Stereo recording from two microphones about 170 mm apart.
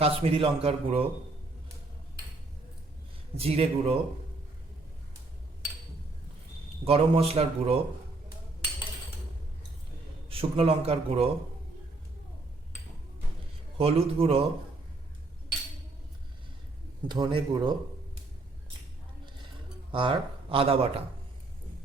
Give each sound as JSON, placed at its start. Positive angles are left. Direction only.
{"t": 0.0, "sound": "speech", "side_deg": -35}
{"t": 3.3, "sound": "speech", "side_deg": -35}
{"t": 6.8, "sound": "speech", "side_deg": -35}
{"t": 10.2, "sound": "speech", "side_deg": -35}
{"t": 13.7, "sound": "speech", "side_deg": -35}
{"t": 17.1, "sound": "a man's voice", "side_deg": -25}
{"t": 19.9, "sound": "speech", "side_deg": -30}